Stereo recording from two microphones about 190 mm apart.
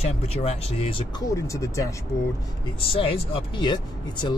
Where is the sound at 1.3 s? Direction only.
15° left (ahead or behind).